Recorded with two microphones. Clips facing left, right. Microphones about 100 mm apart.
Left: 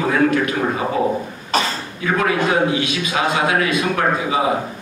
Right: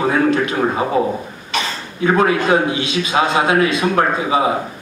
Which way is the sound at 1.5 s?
40° left (ahead or behind).